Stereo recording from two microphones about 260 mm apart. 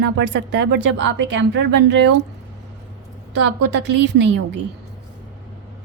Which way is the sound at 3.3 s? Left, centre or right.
Right.